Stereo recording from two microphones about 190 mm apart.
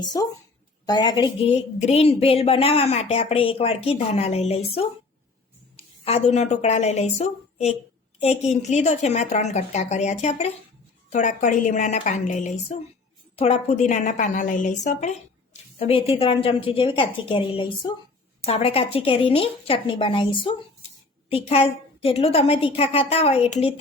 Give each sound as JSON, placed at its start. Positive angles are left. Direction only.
{"t": 0.0, "sound": "a woman's voice", "side_deg": 20}
{"t": 1.5, "sound": "a woman's voice", "side_deg": 35}
{"t": 15.8, "sound": "a woman's voice", "side_deg": 30}